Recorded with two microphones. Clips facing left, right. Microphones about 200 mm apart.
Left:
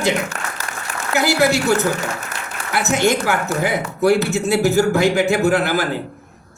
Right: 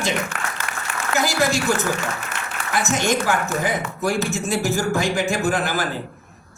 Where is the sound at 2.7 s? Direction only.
65° left (ahead or behind).